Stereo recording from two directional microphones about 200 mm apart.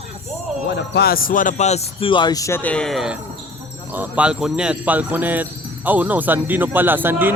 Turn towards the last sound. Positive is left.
turn(degrees=-10)  # may be behind; listen again after turning